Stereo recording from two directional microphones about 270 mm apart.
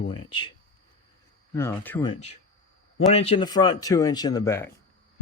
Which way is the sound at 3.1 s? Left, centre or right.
Left.